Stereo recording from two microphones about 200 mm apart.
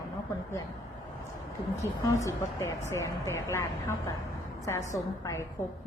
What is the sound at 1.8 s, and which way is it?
Speech, 15° left (ahead or behind).